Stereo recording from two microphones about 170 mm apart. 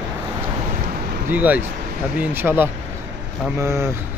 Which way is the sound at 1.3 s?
10° right (ahead or behind).